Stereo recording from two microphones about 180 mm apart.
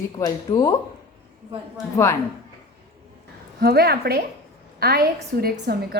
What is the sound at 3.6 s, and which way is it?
A woman's voice, 60° right (ahead or behind).